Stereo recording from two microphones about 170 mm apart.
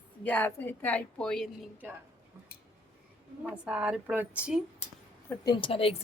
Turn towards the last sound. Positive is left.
turn(degrees=35)  # may be behind; listen again after turning